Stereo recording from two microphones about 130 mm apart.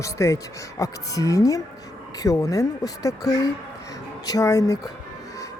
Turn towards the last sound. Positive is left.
turn(degrees=25)  # may be behind; listen again after turning